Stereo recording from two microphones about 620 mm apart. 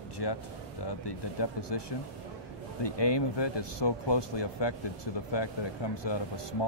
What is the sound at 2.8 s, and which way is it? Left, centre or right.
Speech, left.